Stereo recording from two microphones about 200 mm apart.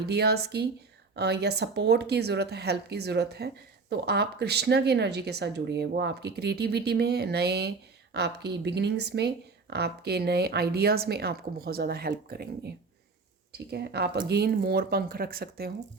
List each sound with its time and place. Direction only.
0.0 s speech: 55° right (ahead or behind)